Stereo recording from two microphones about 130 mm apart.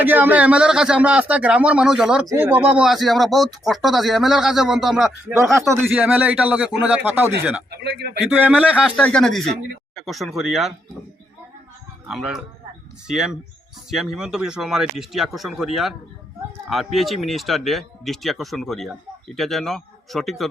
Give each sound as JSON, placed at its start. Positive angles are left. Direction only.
{"t": 0.0, "sound": "speech", "side_deg": -15}
{"t": 2.2, "sound": "speech", "side_deg": -20}
{"t": 5.6, "sound": "speech", "side_deg": -20}
{"t": 9.0, "sound": "speech", "side_deg": 10}
{"t": 12.0, "sound": "speech", "side_deg": 0}